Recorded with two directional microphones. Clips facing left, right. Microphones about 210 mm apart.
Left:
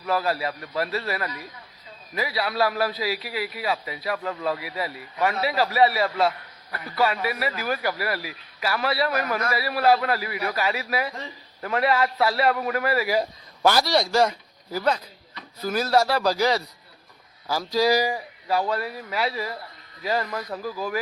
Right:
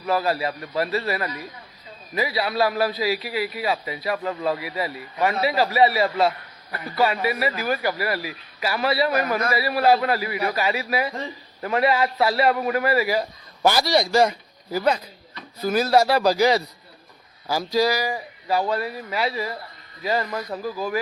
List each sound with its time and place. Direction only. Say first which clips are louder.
0.0 s a man's voice: right 2 dB; 5° right (ahead or behind)
6.7 s a man's voice: right 3 dB; 20° right (ahead or behind)
7.0 s a man's voice: right 2 dB; centre (ahead or behind)